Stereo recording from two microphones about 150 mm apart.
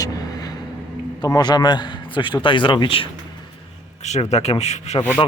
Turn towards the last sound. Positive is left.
turn(degrees=45)  # may be behind; listen again after turning